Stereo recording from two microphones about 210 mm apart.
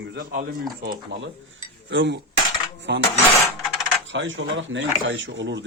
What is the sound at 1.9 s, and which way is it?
Speech, 55° right (ahead or behind).